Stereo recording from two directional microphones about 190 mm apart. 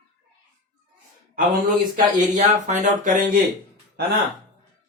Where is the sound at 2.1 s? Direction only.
40° right (ahead or behind).